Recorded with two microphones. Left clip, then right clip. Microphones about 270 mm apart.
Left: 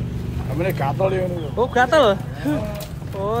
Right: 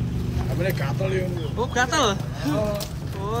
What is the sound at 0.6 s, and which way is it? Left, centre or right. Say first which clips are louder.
Speech: left 6 dB; centre.